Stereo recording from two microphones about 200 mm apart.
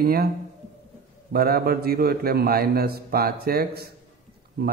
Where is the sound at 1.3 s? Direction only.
50° right (ahead or behind).